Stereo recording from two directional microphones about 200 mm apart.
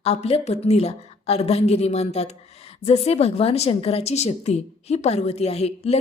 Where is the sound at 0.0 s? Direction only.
30° left (ahead or behind).